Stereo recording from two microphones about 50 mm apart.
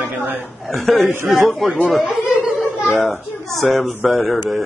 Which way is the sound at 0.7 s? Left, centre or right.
Centre.